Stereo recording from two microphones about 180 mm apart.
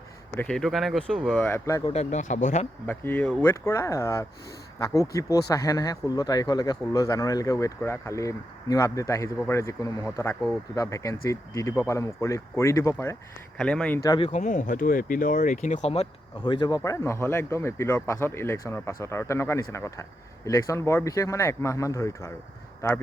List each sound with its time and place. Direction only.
0.3 s speech: 5° left (ahead or behind)
1.9 s speech: 40° left (ahead or behind)
2.8 s speech: 10° left (ahead or behind)
14.0 s speech: 25° left (ahead or behind)
14.3 s speech: 45° left (ahead or behind); by 22.3 s 15° left (ahead or behind)